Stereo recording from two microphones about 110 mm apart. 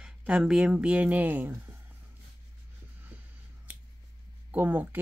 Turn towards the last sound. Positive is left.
turn(degrees=-15)  # may be behind; listen again after turning